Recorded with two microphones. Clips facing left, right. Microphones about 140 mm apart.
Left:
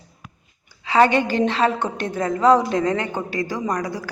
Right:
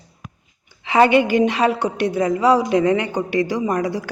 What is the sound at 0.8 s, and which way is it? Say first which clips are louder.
A woman's voice: right 2 dB; 15° right (ahead or behind).